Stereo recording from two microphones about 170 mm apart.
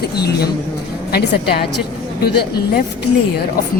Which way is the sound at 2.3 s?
70° left (ahead or behind).